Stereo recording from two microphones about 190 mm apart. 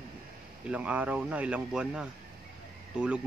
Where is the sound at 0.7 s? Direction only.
5° right (ahead or behind).